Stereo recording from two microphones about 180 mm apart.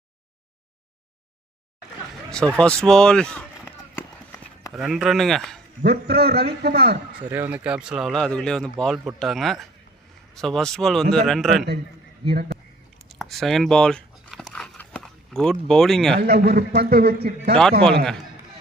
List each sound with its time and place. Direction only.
2.5 s speech: 5° left (ahead or behind)
3.9 s a sound: 10° left (ahead or behind)
4.7 s speech: centre (ahead or behind)
5.8 s a man's voice: 65° right (ahead or behind)
7.3 s speech: 10° right (ahead or behind)
12.2 s speech: 30° right (ahead or behind)
13.1 s a sound: centre (ahead or behind)
16.1 s a man's voice: 60° right (ahead or behind)